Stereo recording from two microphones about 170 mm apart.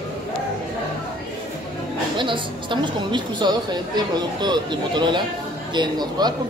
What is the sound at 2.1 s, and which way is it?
A woman's voice, 30° right (ahead or behind).